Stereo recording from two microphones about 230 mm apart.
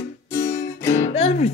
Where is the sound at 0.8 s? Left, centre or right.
Centre.